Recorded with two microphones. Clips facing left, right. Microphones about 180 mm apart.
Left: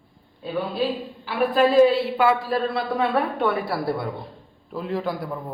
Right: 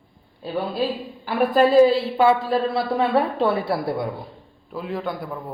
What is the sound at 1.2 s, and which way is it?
Speech, 45° right (ahead or behind).